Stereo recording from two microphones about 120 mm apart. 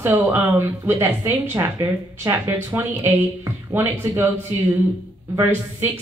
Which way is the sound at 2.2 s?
25° right (ahead or behind).